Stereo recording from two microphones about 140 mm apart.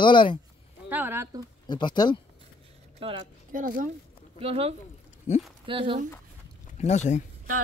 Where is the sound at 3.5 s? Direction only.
75° right (ahead or behind).